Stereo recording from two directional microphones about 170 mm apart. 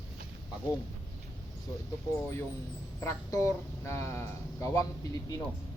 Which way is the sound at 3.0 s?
15° left (ahead or behind).